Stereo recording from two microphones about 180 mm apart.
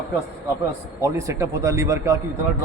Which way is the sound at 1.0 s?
15° right (ahead or behind).